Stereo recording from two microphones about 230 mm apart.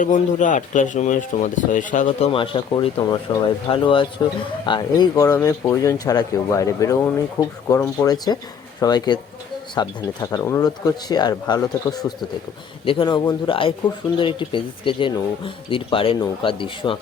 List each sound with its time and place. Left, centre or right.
0.0 s speech: left
2.0 s speech: left